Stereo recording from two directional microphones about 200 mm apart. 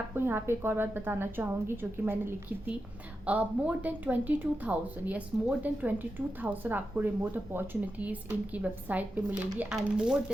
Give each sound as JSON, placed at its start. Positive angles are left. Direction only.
{"t": 0.2, "sound": "a woman's voice", "side_deg": -10}